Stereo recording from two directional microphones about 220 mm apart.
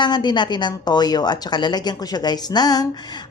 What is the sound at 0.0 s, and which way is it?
A woman's voice, 20° left (ahead or behind).